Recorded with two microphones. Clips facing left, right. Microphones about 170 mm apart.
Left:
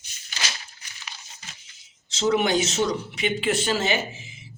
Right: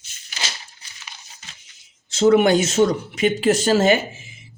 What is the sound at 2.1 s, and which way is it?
Speech, 50° right (ahead or behind).